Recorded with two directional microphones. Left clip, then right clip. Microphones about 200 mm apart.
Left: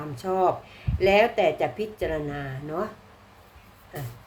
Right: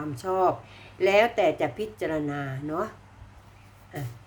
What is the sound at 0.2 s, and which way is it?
A woman's voice, 10° right (ahead or behind).